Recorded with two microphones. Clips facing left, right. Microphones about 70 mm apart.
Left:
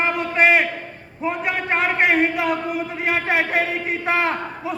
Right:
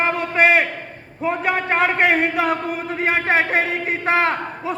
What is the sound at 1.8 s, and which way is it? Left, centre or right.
Speech, centre.